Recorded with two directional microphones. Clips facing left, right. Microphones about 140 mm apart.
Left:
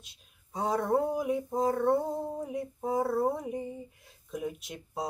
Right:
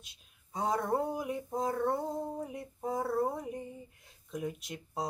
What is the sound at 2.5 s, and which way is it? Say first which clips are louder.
Speech: left 5 dB; 5° left (ahead or behind).